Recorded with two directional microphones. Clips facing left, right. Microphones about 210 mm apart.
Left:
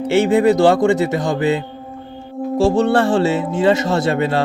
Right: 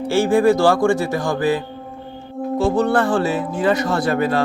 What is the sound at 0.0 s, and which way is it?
Speech, 20° left (ahead or behind).